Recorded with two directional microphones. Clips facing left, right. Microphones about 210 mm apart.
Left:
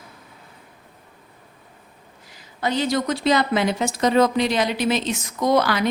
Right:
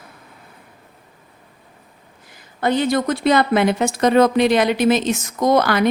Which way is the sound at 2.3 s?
55° right (ahead or behind).